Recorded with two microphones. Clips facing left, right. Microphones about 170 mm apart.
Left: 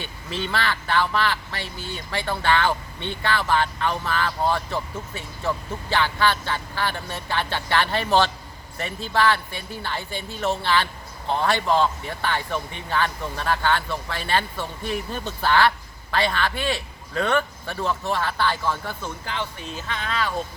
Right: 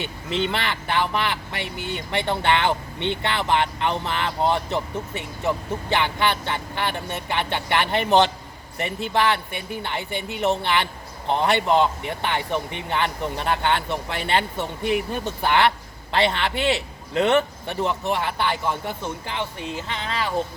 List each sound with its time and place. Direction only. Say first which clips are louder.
0.0 s speech: right 5 dB; 20° right (ahead or behind)
1.7 s speech: right 4 dB; 65° right (ahead or behind)
2.0 s speech: right 3 dB; 20° right (ahead or behind)